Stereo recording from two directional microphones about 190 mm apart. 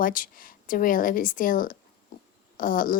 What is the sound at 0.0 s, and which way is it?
Speech, 45° left (ahead or behind).